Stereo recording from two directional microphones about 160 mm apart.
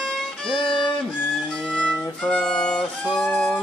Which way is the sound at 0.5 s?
30° left (ahead or behind).